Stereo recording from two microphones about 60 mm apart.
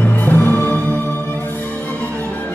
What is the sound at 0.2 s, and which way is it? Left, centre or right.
Music, left.